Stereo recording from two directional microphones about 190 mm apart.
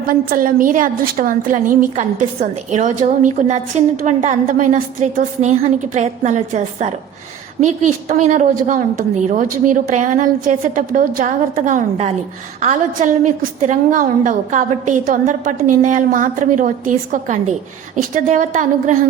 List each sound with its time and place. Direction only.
0.1 s a woman's voice: 50° right (ahead or behind)